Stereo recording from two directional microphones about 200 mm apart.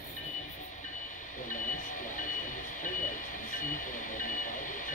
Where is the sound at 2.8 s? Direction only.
40° left (ahead or behind).